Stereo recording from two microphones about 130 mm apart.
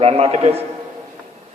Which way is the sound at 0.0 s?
50° right (ahead or behind).